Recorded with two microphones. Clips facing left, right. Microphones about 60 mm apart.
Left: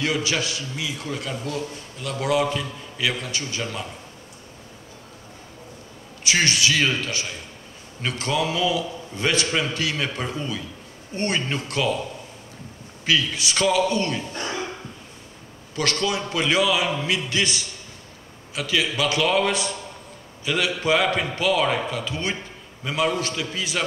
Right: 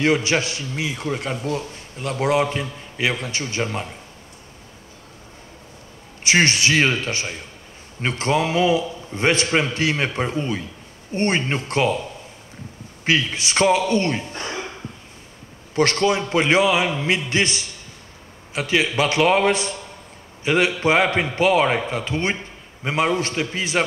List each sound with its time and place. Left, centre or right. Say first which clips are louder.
0.0 s a man's voice: right 5 dB; right
6.2 s a man's voice: right 3 dB; right
13.0 s a man's voice: right 2 dB; right
15.7 s a man's voice: right 6 dB; right